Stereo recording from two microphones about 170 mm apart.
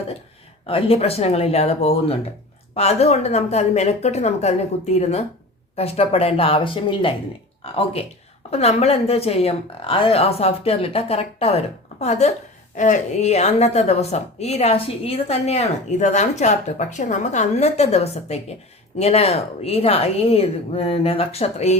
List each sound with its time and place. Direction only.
0.7 s a woman's voice: 35° left (ahead or behind)